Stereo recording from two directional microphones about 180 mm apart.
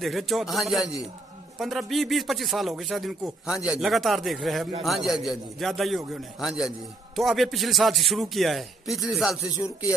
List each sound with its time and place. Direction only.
0.0 s speech: centre (ahead or behind)